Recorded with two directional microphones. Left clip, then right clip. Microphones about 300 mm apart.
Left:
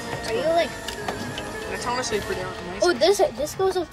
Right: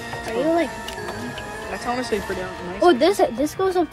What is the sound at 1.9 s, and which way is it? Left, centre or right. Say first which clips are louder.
Speech: right 1 dB; centre.